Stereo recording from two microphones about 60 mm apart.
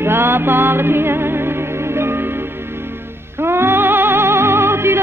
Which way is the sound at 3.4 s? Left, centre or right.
Right.